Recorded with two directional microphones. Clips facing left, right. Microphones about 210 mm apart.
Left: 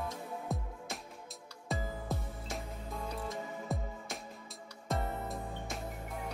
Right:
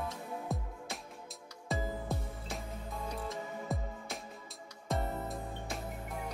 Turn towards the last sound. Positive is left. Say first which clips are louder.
# even
turn(degrees=0)  # may be behind; listen again after turning